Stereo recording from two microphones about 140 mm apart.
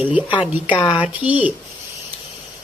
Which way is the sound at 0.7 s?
40° left (ahead or behind).